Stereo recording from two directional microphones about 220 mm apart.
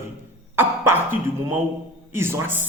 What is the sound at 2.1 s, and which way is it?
Speech, 10° right (ahead or behind).